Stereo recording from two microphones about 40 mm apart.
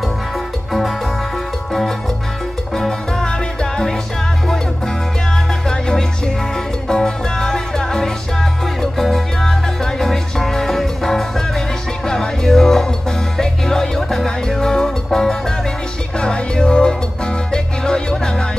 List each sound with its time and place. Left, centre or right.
3.3 s music: centre
5.7 s music: centre